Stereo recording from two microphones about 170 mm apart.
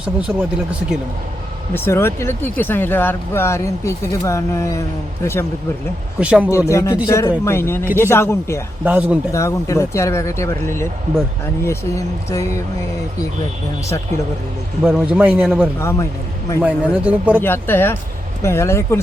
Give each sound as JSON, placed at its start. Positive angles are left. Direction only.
{"t": 0.3, "sound": "speech", "side_deg": -5}
{"t": 1.7, "sound": "speech", "side_deg": 15}
{"t": 6.1, "sound": "a man's voice", "side_deg": -10}
{"t": 6.7, "sound": "speech", "side_deg": 15}
{"t": 8.8, "sound": "a man's voice", "side_deg": -10}
{"t": 9.3, "sound": "speech", "side_deg": 20}
{"t": 14.8, "sound": "a man's voice", "side_deg": -5}
{"t": 15.8, "sound": "speech", "side_deg": 15}
{"t": 16.6, "sound": "a man's voice", "side_deg": -10}
{"t": 17.4, "sound": "speech", "side_deg": 15}